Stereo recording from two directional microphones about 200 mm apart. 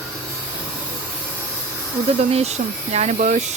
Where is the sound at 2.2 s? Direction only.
30° right (ahead or behind).